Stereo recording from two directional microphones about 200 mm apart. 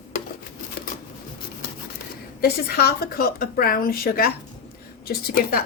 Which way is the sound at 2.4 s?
50° left (ahead or behind).